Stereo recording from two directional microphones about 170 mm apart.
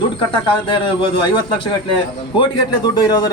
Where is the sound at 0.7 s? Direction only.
30° left (ahead or behind).